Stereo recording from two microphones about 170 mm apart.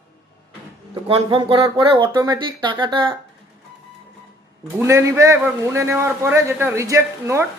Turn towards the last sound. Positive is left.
turn(degrees=-15)  # may be behind; listen again after turning